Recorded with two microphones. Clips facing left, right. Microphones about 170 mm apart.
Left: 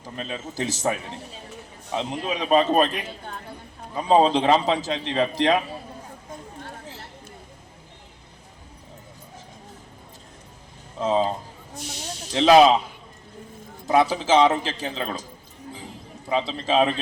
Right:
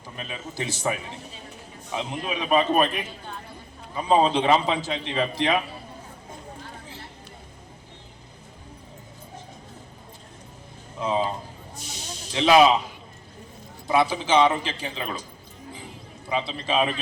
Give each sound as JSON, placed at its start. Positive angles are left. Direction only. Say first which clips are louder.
{"t": 0.2, "sound": "a man's voice", "louder": "left 3 dB", "side_deg": 40}
{"t": 4.1, "sound": "a man's voice", "louder": "left 2 dB", "side_deg": 35}
{"t": 11.0, "sound": "a sound", "louder": "left 3 dB", "side_deg": 40}
{"t": 12.3, "sound": "a man's voice", "louder": "left 3 dB", "side_deg": 35}
{"t": 13.8, "sound": "a man's voice", "louder": "left 2 dB", "side_deg": 40}
{"t": 16.3, "sound": "a man's voice", "louder": "left 3 dB", "side_deg": 40}